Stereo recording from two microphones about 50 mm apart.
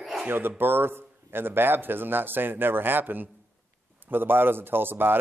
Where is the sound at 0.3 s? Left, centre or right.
Right.